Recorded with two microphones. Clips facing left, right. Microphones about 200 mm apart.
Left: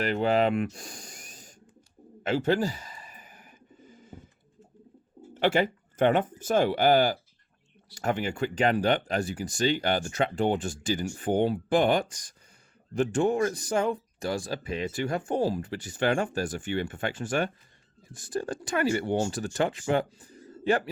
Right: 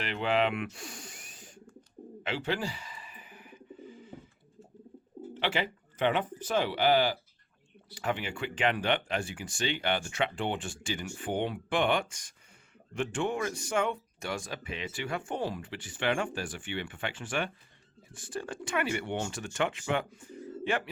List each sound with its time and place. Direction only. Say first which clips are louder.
0.0 s speech: left 5 dB; 40° left (ahead or behind)
2.2 s bird: left 8 dB; 45° left (ahead or behind)
5.3 s speech: left 8 dB; 45° left (ahead or behind)